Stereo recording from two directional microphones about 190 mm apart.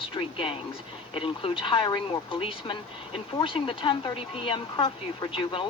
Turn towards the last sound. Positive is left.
turn(degrees=30)  # may be behind; listen again after turning